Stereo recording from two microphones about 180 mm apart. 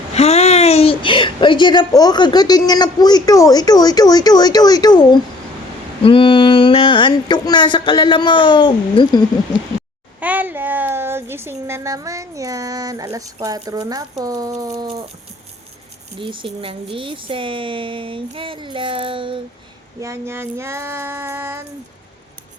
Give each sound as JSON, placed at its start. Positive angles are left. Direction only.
{"t": 0.1, "sound": "speech", "side_deg": 35}
{"t": 10.2, "sound": "speech", "side_deg": -10}
{"t": 16.1, "sound": "speech", "side_deg": -30}
{"t": 20.0, "sound": "child singing", "side_deg": -15}